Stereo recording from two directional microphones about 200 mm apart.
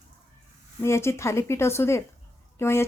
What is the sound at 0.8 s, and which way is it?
Speech, 15° left (ahead or behind).